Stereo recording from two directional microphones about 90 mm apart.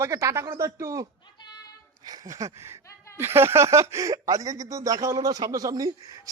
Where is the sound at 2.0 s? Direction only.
45° right (ahead or behind).